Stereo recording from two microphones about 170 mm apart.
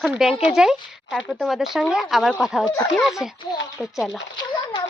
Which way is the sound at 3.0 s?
Centre (ahead or behind).